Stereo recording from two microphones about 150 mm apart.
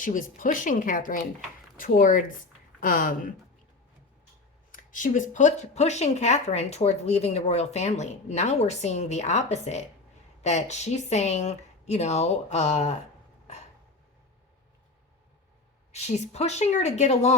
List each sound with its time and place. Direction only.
0.0 s speech: 60° left (ahead or behind)
4.7 s speech: 60° left (ahead or behind); by 13.0 s 45° left (ahead or behind)
15.9 s speech: 45° left (ahead or behind)